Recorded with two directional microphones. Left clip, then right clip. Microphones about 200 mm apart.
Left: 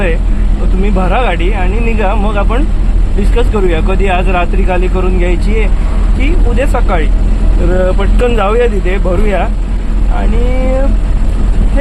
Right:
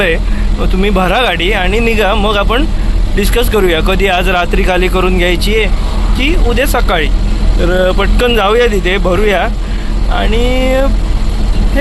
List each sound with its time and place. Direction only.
0.8 s speech: 10° right (ahead or behind)